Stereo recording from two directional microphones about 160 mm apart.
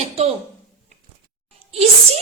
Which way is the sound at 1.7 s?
40° right (ahead or behind).